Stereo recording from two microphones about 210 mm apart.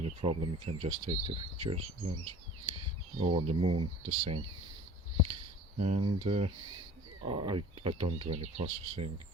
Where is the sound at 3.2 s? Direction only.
30° right (ahead or behind).